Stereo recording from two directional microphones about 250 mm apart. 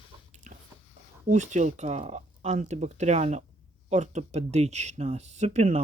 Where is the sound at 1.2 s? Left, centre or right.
Right.